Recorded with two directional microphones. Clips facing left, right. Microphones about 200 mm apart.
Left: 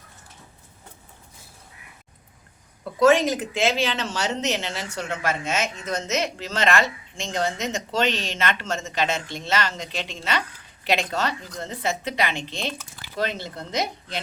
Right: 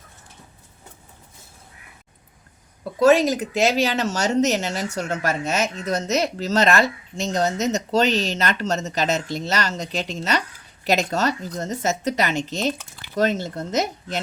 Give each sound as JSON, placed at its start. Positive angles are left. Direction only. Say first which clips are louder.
{"t": 3.0, "sound": "a woman's voice", "louder": "right 2 dB", "side_deg": -40}